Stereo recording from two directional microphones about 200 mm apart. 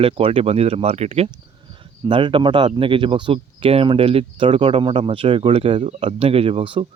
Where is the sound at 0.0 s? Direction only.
25° right (ahead or behind).